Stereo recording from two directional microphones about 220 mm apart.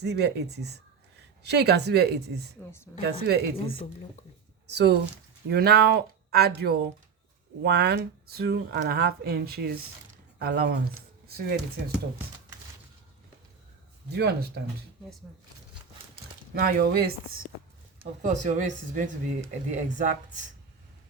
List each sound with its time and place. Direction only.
0.0 s speech: 50° right (ahead or behind)
14.1 s speech: 50° right (ahead or behind)
16.6 s speech: 45° right (ahead or behind)
18.2 s speech: 35° right (ahead or behind)